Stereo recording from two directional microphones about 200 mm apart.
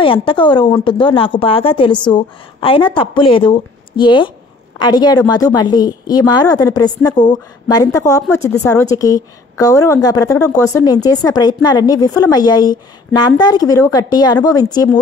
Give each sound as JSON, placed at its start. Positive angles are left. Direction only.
{"t": 0.0, "sound": "a woman's voice", "side_deg": 25}